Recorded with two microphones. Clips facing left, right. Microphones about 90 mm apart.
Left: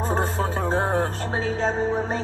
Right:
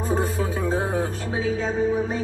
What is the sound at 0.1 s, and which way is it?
Music, 40° left (ahead or behind).